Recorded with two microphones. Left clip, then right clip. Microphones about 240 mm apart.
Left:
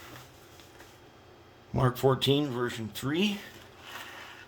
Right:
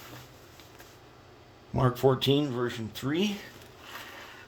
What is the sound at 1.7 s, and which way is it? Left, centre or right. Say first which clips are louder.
Speech: right 1 dB; centre.